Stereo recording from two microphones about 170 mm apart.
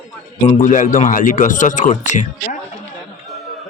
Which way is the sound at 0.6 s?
50° left (ahead or behind).